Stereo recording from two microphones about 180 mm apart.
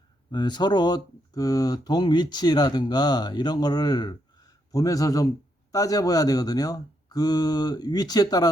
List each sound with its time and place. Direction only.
0.3 s speech: 25° left (ahead or behind)